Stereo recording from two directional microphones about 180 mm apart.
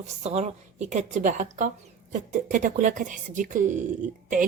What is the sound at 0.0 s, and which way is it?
A woman's voice, 40° right (ahead or behind).